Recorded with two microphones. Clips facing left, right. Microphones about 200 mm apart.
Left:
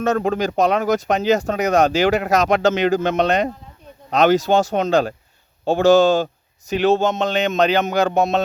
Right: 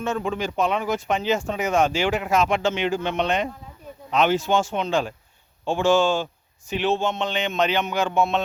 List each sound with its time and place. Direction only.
0.3 s speech: 40° left (ahead or behind)